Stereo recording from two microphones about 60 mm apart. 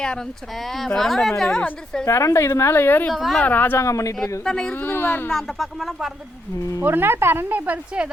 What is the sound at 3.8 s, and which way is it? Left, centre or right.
Speech, left.